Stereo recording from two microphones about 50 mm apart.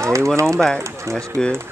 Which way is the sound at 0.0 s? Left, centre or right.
Right.